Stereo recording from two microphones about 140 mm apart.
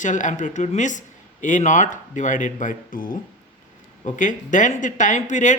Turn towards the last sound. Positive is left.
turn(degrees=60)  # may be behind; listen again after turning